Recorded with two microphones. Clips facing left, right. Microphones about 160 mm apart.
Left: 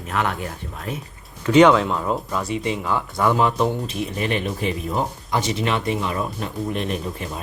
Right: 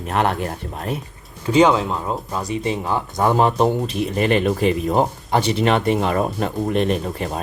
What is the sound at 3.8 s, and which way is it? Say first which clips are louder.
Speech: right 5 dB; 65° right (ahead or behind).